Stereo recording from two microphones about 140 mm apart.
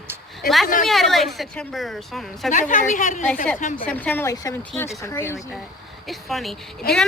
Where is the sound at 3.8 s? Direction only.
10° left (ahead or behind).